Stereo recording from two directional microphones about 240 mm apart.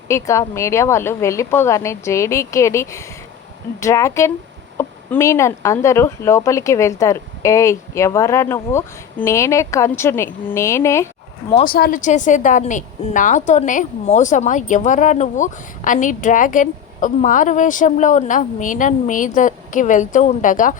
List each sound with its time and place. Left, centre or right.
0.1 s speech: centre
11.6 s a woman's voice: left